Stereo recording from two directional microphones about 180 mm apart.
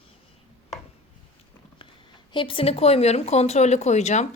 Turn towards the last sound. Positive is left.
turn(degrees=40)  # may be behind; listen again after turning